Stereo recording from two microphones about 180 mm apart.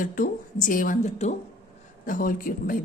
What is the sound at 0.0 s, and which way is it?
A woman's voice, 50° left (ahead or behind).